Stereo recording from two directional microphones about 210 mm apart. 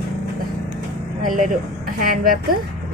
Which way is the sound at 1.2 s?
40° right (ahead or behind).